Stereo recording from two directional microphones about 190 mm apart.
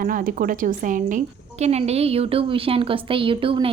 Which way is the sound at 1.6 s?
35° right (ahead or behind).